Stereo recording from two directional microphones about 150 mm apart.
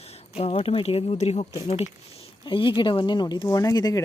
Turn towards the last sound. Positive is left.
turn(degrees=25)  # may be behind; listen again after turning